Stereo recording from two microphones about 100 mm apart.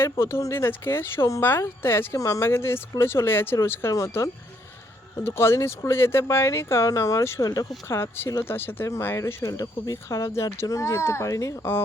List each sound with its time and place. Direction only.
0.0 s speech: 25° left (ahead or behind)
8.5 s speech: 20° left (ahead or behind)